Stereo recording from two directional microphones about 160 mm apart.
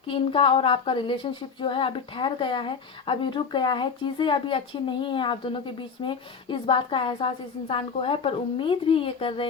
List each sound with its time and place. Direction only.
0.1 s speech: 35° left (ahead or behind)